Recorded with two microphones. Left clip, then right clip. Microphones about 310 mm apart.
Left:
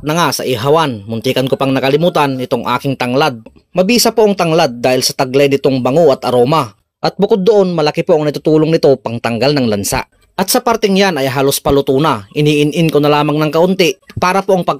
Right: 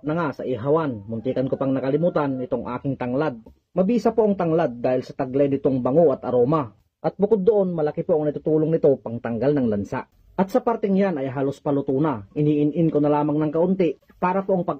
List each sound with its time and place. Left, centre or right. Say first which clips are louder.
0.0 s speech: left 11 dB; left
7.2 s a man's voice: left 8 dB; left
7.7 s speech: left 10 dB; left